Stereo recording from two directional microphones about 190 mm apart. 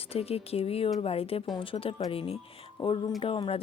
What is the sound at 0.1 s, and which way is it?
Speech, 30° left (ahead or behind).